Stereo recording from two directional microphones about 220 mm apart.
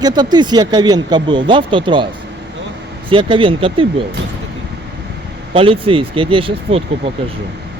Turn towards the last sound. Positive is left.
turn(degrees=-25)  # may be behind; listen again after turning